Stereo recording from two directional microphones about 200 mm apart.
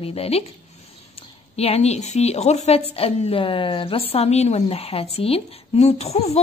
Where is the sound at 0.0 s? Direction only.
30° left (ahead or behind).